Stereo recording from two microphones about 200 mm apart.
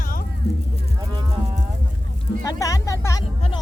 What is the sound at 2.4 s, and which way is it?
Music, 15° left (ahead or behind).